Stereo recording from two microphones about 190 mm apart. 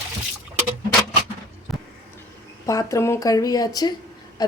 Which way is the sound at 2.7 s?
15° left (ahead or behind).